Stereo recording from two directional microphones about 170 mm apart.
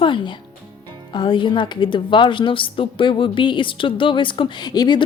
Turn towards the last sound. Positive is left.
turn(degrees=25)  # may be behind; listen again after turning